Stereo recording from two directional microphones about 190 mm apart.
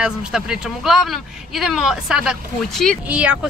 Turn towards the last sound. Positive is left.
turn(degrees=-5)  # may be behind; listen again after turning